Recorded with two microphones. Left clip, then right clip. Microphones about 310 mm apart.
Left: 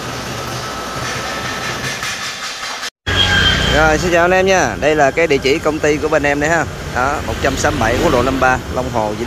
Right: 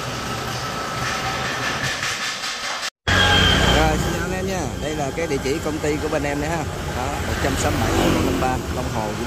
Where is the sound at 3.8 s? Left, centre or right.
Centre.